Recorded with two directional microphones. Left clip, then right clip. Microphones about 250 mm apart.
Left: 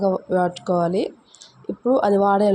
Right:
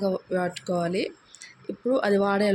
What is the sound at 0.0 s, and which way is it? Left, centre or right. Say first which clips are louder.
A woman's voice: left 7 dB; centre.